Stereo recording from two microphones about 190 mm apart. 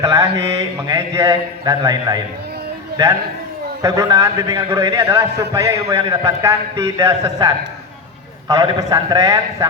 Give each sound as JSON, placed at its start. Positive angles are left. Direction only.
{"t": 0.0, "sound": "a man's voice", "side_deg": -15}
{"t": 3.8, "sound": "a man's voice", "side_deg": -15}